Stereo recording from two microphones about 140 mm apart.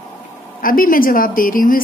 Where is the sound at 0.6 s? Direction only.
85° left.